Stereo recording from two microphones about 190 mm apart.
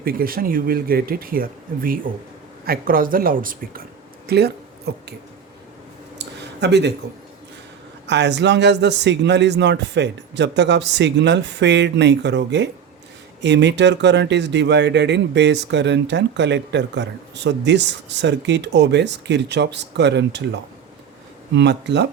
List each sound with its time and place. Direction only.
0.0 s a man's voice: 50° right (ahead or behind)
6.1 s a sound: 65° right (ahead or behind)
8.0 s a man's voice: 65° right (ahead or behind)
21.5 s a man's voice: 65° right (ahead or behind)